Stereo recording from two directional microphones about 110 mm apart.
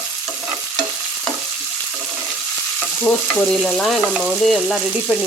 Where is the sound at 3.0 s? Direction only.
5° left (ahead or behind).